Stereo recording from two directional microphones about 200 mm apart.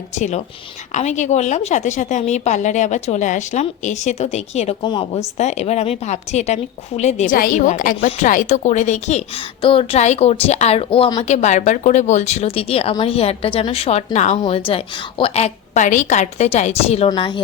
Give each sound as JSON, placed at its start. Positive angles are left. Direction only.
{"t": 0.2, "sound": "a woman's voice", "side_deg": 35}
{"t": 5.4, "sound": "a woman's voice", "side_deg": 35}